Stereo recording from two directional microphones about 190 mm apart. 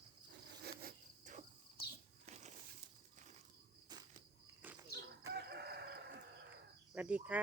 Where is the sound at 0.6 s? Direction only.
50° right (ahead or behind).